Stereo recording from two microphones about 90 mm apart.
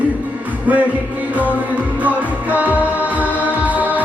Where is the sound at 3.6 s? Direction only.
15° right (ahead or behind).